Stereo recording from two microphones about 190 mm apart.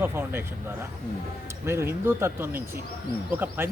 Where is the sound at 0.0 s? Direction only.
10° right (ahead or behind).